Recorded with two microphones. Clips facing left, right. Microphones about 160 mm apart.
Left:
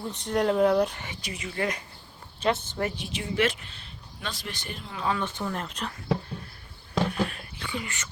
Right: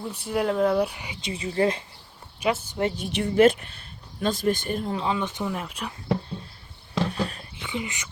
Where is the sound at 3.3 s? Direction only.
50° right (ahead or behind).